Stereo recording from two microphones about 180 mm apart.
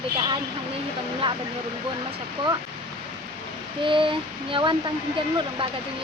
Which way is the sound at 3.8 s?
30° right (ahead or behind).